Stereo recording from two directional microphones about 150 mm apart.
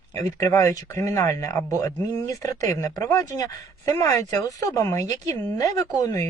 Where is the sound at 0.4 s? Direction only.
20° left (ahead or behind).